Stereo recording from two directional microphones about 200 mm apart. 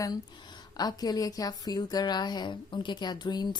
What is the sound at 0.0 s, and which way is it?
A woman's voice, 20° left (ahead or behind).